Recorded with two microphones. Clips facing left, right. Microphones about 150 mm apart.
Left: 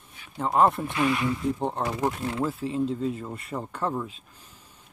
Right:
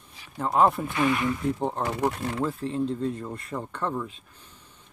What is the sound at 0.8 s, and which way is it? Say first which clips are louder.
Speech: even; 20° left (ahead or behind).